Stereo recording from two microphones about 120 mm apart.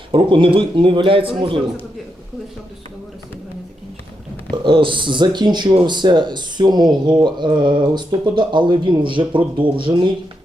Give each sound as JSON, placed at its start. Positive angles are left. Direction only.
{"t": 0.1, "sound": "speech", "side_deg": -45}
{"t": 4.5, "sound": "speech", "side_deg": -45}